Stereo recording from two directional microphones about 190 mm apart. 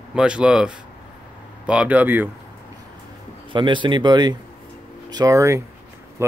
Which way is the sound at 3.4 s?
25° right (ahead or behind).